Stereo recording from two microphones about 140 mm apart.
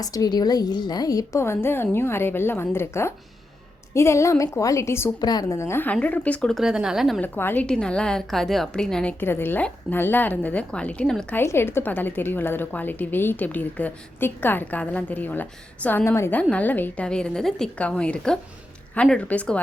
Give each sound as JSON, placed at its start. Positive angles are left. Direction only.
{"t": 0.0, "sound": "a woman's voice", "side_deg": 25}
{"t": 5.2, "sound": "a woman's voice", "side_deg": 30}
{"t": 7.2, "sound": "a woman's voice", "side_deg": 15}
{"t": 11.3, "sound": "a woman's voice", "side_deg": 15}